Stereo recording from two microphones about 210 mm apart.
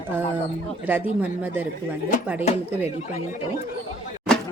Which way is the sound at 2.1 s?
40° left (ahead or behind).